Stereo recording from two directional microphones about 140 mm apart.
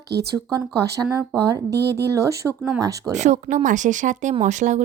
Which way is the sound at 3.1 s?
55° right (ahead or behind).